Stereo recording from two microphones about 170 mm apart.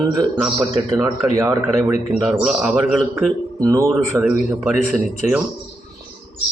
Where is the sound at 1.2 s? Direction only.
15° right (ahead or behind).